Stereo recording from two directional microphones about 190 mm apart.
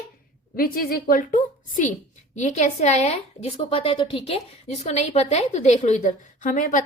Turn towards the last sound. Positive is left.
turn(degrees=40)  # may be behind; listen again after turning